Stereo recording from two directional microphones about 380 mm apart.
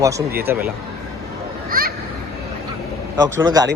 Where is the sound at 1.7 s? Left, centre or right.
Right.